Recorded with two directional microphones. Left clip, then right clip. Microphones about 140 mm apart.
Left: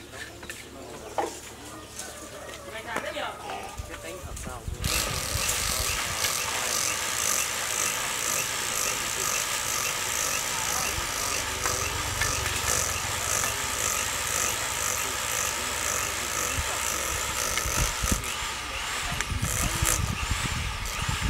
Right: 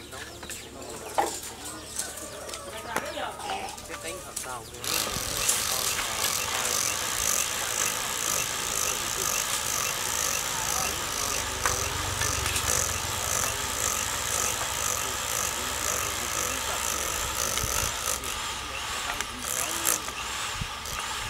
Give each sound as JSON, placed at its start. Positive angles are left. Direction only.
{"t": 1.2, "sound": "bird", "side_deg": -45}
{"t": 4.8, "sound": "vehicle", "side_deg": -5}